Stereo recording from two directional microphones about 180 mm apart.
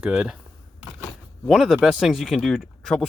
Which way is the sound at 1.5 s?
Centre (ahead or behind).